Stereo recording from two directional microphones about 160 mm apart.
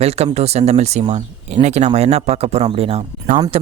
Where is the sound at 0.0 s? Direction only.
40° right (ahead or behind).